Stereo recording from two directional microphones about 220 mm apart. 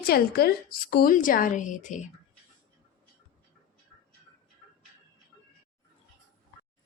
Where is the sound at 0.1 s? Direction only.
45° left (ahead or behind).